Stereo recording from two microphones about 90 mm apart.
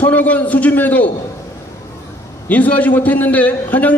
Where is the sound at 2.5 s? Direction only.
15° left (ahead or behind).